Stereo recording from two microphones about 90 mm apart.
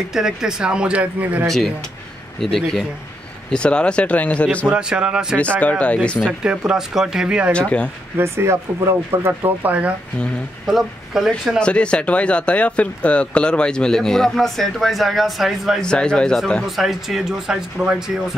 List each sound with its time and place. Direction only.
0.1 s speech: 5° right (ahead or behind)
2.4 s speech: 5° left (ahead or behind)
4.6 s speech: 10° right (ahead or behind)
5.6 s speech: 15° left (ahead or behind)
6.1 s speech: 5° right (ahead or behind)
7.5 s speech: 10° left (ahead or behind)
8.2 s speech: 30° right (ahead or behind)
10.7 s speech: 5° right (ahead or behind)
11.6 s speech: 10° left (ahead or behind)
15.8 s speech: 10° left (ahead or behind)
16.6 s speech: 5° right (ahead or behind)